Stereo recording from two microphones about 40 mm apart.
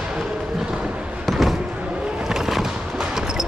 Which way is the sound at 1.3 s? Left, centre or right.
Centre.